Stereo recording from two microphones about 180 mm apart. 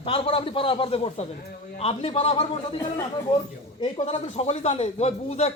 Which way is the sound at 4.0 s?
35° left (ahead or behind).